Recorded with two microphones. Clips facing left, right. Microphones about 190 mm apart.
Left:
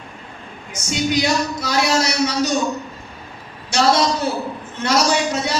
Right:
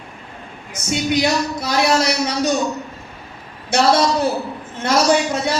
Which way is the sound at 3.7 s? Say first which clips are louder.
Right 1 dB; 55° right (ahead or behind).